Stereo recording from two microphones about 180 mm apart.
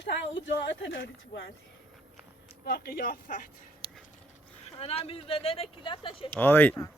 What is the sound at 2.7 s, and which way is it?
Speech, 60° left (ahead or behind).